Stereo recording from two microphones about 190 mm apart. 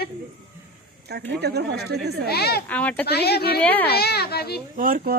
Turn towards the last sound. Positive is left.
turn(degrees=-45)  # may be behind; listen again after turning